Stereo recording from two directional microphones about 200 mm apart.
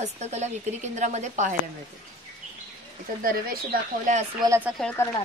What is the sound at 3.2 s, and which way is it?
Speech, 45° right (ahead or behind).